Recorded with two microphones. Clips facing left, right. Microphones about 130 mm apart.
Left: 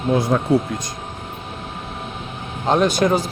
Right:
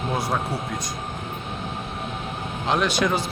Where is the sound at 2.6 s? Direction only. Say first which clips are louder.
Left 6 dB; 40° left (ahead or behind).